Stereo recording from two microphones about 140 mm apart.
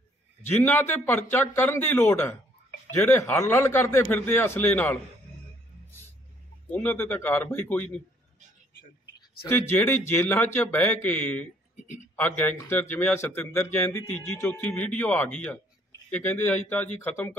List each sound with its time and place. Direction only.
0.6 s speech: 15° left (ahead or behind)
6.7 s speech: 10° left (ahead or behind)
9.5 s speech: 15° left (ahead or behind)